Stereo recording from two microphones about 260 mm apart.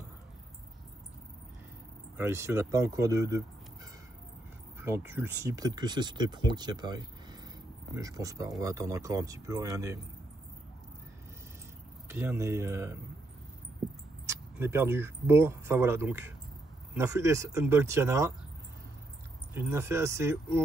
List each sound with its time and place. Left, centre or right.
2.1 s speech: centre
4.7 s speech: centre
12.1 s speech: centre
14.2 s speech: centre
19.5 s speech: centre